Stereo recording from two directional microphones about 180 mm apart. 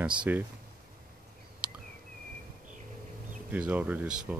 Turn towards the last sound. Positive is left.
turn(degrees=-5)  # may be behind; listen again after turning